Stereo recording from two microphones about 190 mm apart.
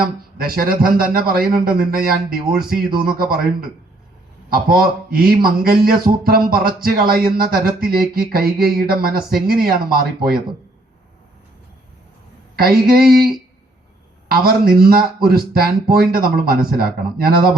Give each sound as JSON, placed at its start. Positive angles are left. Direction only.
{"t": 0.3, "sound": "speech", "side_deg": -50}
{"t": 12.5, "sound": "speech", "side_deg": -50}
{"t": 14.3, "sound": "speech", "side_deg": -50}